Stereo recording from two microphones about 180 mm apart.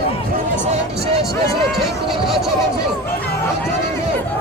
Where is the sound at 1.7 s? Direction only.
Centre (ahead or behind).